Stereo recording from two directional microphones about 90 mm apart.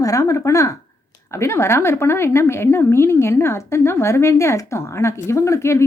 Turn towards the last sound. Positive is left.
turn(degrees=30)  # may be behind; listen again after turning